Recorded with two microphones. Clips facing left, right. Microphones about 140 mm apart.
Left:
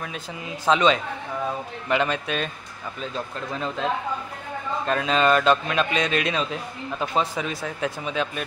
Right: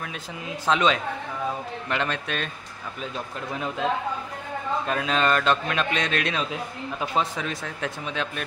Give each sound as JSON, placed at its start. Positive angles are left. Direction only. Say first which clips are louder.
{"t": 0.7, "sound": "a man's voice", "louder": "left 3 dB", "side_deg": 0}
{"t": 3.0, "sound": "speech", "louder": "left 2 dB", "side_deg": -10}
{"t": 4.8, "sound": "a man's voice", "louder": "left 4 dB", "side_deg": 0}